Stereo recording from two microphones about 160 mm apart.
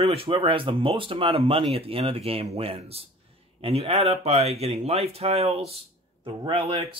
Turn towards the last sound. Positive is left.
turn(degrees=-35)  # may be behind; listen again after turning